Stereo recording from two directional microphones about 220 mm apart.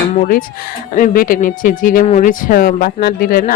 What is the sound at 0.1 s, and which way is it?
Speech, 35° left (ahead or behind).